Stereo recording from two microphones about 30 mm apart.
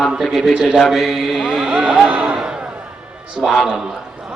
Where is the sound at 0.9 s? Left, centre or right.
Centre.